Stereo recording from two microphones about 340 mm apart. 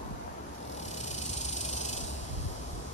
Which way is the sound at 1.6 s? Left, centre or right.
Centre.